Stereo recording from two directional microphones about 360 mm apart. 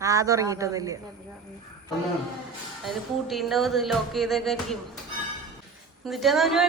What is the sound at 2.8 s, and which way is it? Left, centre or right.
Speech, centre.